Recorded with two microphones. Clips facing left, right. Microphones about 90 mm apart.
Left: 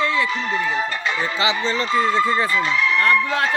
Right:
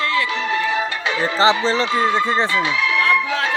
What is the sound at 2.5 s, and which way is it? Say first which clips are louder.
Speech: even; 80° right.